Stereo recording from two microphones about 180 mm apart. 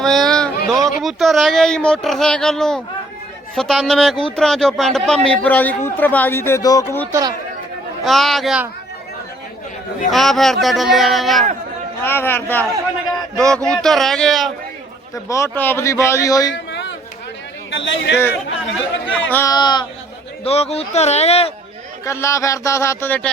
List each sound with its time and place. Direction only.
0.0 s a sound: centre (ahead or behind)
0.9 s speech: centre (ahead or behind)
7.1 s speech: 20° right (ahead or behind)
8.0 s speech: centre (ahead or behind)
10.1 s speech: centre (ahead or behind)
12.0 s speech: 10° left (ahead or behind)
15.1 s speech: 15° left (ahead or behind)
16.5 s a sound: 75° left (ahead or behind)
17.7 s speech: 90° left
19.3 s speech: 15° left (ahead or behind)
20.4 s speech: 35° left (ahead or behind)
22.0 s speech: 15° left (ahead or behind)